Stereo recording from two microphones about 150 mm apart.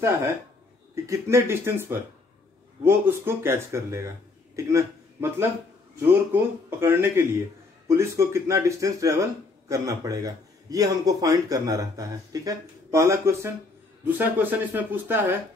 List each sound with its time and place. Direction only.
1.0 s speech: 20° right (ahead or behind)
3.3 s a man's voice: 15° right (ahead or behind)